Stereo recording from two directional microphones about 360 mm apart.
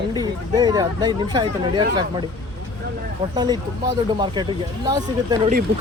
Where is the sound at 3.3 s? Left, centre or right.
Centre.